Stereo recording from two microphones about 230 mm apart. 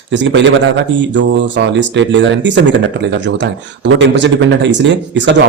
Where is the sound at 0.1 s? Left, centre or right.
Right.